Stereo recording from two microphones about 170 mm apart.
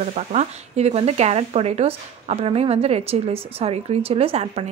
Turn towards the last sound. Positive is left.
turn(degrees=-35)  # may be behind; listen again after turning